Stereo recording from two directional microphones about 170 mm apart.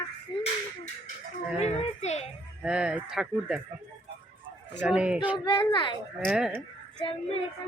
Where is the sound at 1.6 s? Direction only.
40° left (ahead or behind).